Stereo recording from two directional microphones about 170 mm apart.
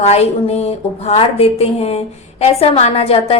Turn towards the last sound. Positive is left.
turn(degrees=35)  # may be behind; listen again after turning